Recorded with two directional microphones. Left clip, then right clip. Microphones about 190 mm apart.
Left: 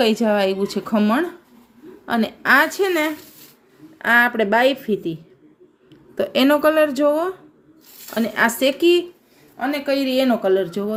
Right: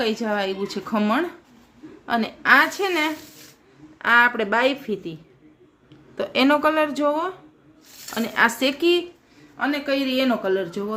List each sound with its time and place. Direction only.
0.0 s speech: 25° left (ahead or behind)
6.1 s speech: 15° left (ahead or behind)